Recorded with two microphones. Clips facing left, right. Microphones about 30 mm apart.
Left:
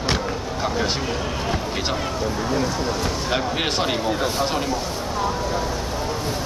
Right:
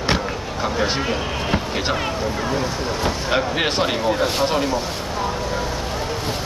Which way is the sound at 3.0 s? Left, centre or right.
Centre.